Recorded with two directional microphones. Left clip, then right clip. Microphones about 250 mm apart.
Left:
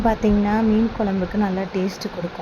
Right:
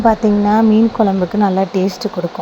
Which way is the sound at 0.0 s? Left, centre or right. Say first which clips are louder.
Right 7 dB; centre.